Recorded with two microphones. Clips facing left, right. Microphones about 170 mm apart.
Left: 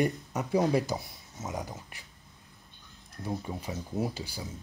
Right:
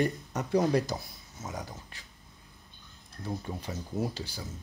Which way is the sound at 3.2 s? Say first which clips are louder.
Left 1 dB; 10° left (ahead or behind).